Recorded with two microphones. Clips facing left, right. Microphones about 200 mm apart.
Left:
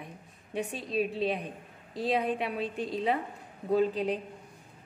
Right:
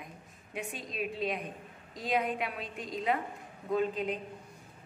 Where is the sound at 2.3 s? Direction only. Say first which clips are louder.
Left 5 dB; 30° left (ahead or behind).